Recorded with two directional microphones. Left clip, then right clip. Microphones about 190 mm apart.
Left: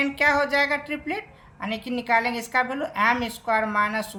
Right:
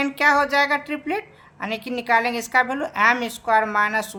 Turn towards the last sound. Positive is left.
turn(degrees=-30)  # may be behind; listen again after turning